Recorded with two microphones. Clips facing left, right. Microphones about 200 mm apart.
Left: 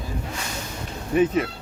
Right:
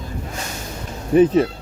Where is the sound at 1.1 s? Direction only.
35° right (ahead or behind).